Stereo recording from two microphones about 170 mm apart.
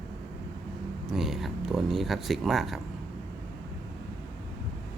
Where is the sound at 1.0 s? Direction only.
Centre (ahead or behind).